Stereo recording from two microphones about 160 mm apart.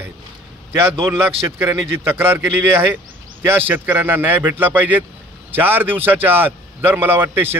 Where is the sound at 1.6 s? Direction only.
15° right (ahead or behind).